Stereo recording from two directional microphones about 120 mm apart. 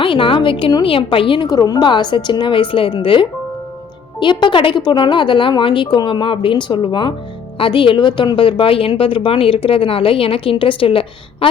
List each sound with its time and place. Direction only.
0.0 s a woman's voice: 45° left (ahead or behind)
1.5 s a woman's voice: 30° left (ahead or behind); by 11.4 s 50° left (ahead or behind)